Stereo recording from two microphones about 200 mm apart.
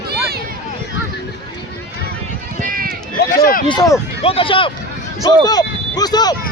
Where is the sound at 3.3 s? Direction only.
45° left (ahead or behind).